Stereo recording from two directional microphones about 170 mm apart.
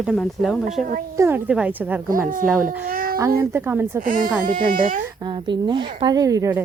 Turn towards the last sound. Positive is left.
turn(degrees=-15)  # may be behind; listen again after turning